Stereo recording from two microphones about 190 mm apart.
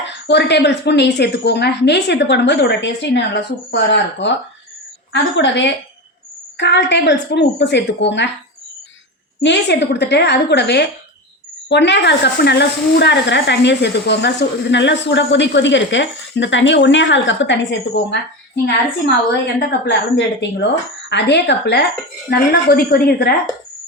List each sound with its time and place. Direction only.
0.1 s speech: 65° left (ahead or behind)
9.4 s speech: 65° left (ahead or behind)
19.5 s speech: 65° left (ahead or behind)